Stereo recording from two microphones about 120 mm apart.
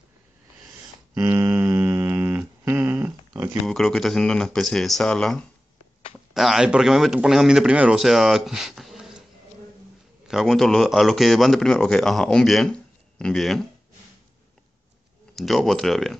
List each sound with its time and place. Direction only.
1.1 s a sound: 25° right (ahead or behind)
3.6 s a man's voice: 5° left (ahead or behind)
10.2 s a man's voice: centre (ahead or behind)
15.3 s a man's voice: centre (ahead or behind)